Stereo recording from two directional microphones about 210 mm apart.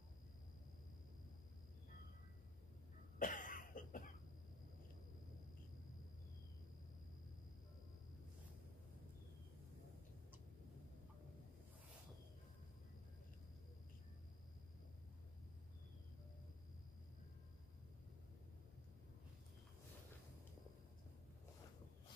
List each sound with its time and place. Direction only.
3.2 s cough: 40° left (ahead or behind)